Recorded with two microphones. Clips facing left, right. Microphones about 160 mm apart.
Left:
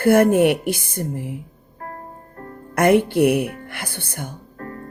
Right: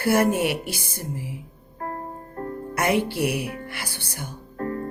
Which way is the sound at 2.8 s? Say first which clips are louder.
Left 8 dB; 55° left (ahead or behind).